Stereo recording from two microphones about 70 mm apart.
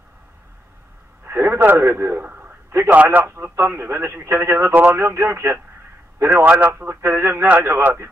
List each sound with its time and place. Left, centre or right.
1.2 s a man's voice: right